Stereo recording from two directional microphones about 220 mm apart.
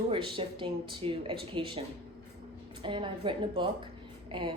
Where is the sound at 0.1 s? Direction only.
25° right (ahead or behind).